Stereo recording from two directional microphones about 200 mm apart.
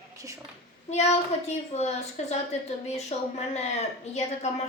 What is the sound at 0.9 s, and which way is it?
A woman's voice, 35° left (ahead or behind).